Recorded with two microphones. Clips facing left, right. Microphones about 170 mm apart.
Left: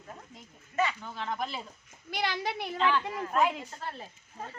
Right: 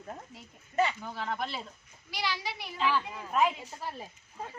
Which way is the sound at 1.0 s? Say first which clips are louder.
Even; centre (ahead or behind).